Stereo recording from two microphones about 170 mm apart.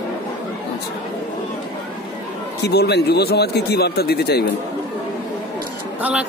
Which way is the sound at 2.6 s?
75° left (ahead or behind).